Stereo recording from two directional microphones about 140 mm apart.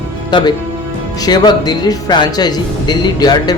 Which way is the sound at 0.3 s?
35° left (ahead or behind).